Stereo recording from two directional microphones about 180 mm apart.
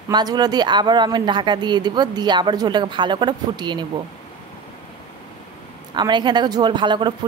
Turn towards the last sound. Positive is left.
turn(degrees=-25)  # may be behind; listen again after turning